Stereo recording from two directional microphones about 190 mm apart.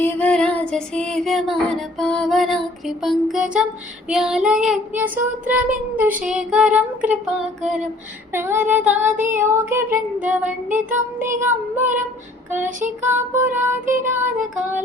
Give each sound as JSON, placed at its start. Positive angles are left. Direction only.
{"t": 0.0, "sound": "music", "side_deg": 5}
{"t": 2.0, "sound": "child singing", "side_deg": 5}
{"t": 8.3, "sound": "child singing", "side_deg": -10}